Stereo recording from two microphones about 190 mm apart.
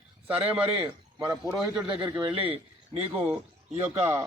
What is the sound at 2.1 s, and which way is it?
Speech, 30° right (ahead or behind).